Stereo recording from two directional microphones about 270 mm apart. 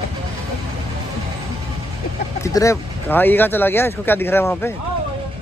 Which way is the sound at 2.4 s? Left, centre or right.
Centre.